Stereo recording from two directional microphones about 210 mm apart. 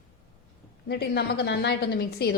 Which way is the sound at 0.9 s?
50° left (ahead or behind).